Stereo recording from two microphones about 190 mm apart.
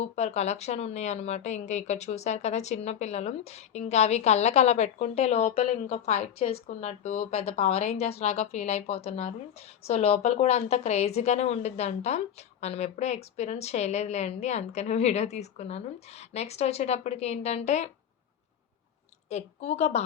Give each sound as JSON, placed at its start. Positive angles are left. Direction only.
{"t": 0.0, "sound": "speech", "side_deg": 35}
{"t": 19.3, "sound": "speech", "side_deg": 35}